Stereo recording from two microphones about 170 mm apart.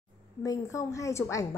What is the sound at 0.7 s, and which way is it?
Speech, 20° left (ahead or behind).